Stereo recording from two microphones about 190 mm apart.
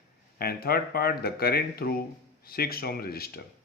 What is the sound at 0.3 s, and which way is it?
Speech, 55° left (ahead or behind).